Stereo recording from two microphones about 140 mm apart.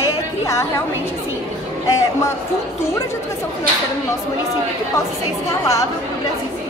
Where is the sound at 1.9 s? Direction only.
25° left (ahead or behind).